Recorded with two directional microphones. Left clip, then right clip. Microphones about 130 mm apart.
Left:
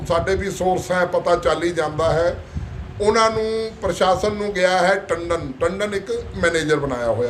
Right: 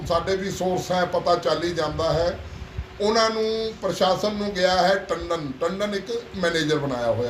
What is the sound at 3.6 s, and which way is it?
Speech, 15° left (ahead or behind).